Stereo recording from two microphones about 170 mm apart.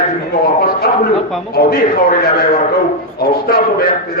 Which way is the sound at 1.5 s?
65° left (ahead or behind).